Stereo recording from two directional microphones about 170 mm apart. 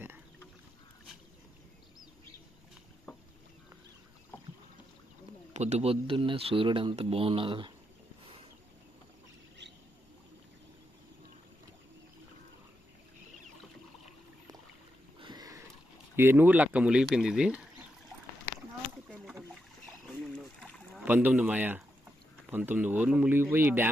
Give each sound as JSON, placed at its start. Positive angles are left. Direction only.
{"t": 5.5, "sound": "speech", "side_deg": -40}
{"t": 15.2, "sound": "a sound", "side_deg": -25}
{"t": 16.1, "sound": "speech", "side_deg": -10}
{"t": 19.0, "sound": "boat", "side_deg": 0}
{"t": 20.4, "sound": "a sound", "side_deg": 0}
{"t": 21.0, "sound": "speech", "side_deg": -10}